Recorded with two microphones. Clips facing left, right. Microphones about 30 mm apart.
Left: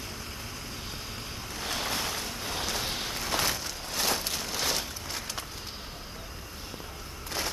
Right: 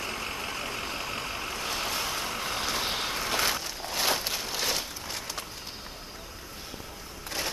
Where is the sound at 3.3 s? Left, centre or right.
Centre.